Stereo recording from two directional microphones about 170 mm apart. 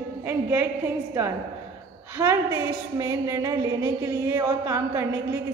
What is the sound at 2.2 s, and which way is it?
A woman's voice, 15° right (ahead or behind).